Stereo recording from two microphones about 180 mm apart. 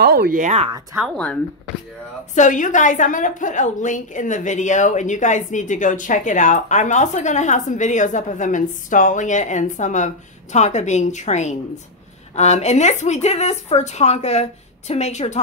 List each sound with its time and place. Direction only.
0.0 s speech: 65° right (ahead or behind)
0.4 s speech: 40° right (ahead or behind)
1.1 s speech: 5° left (ahead or behind)
2.3 s a woman's voice: 45° left (ahead or behind)